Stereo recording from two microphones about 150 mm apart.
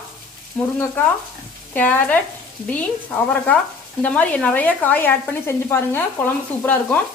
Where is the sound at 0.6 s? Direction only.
10° left (ahead or behind).